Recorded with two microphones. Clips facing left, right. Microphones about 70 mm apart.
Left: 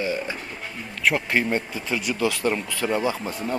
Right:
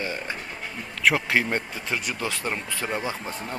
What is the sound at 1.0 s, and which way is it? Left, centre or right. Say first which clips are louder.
Speech: even; right.